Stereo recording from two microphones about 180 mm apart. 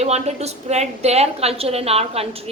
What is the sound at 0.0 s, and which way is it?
A woman's voice, 35° right (ahead or behind).